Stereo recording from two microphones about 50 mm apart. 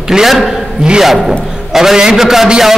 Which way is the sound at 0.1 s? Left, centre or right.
Centre.